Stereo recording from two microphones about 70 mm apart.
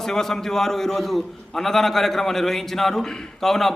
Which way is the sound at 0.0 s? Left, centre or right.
Centre.